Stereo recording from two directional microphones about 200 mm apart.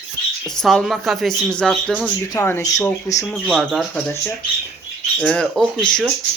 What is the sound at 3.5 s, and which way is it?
Speech, centre (ahead or behind).